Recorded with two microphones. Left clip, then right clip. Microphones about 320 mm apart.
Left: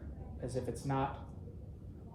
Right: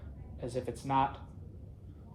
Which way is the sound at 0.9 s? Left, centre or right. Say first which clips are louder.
Right 9 dB; right.